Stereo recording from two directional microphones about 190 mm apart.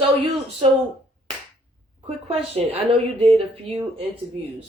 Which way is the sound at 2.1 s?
35° right (ahead or behind).